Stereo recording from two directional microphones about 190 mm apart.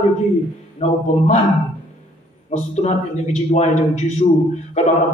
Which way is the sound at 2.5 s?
35° left (ahead or behind).